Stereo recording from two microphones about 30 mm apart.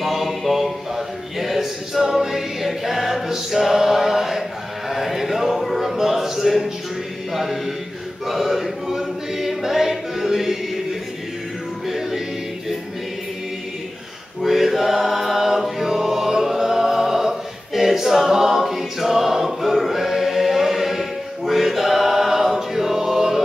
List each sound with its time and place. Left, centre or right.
0.0 s a sound: centre
0.4 s a capella: centre
3.3 s a sound: centre
5.6 s music: centre
5.9 s speech: centre
8.3 s choir: centre
14.4 s choir: centre